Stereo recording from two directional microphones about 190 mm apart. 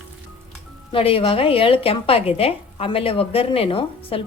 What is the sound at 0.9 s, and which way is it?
A woman's voice, 30° left (ahead or behind).